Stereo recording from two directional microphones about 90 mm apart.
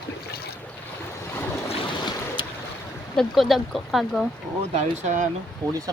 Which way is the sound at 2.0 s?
60° left (ahead or behind).